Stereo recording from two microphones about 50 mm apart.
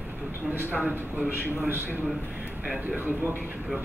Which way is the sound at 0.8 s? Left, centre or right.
Right.